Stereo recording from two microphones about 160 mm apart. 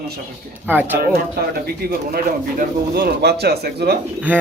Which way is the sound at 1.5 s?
70° right (ahead or behind).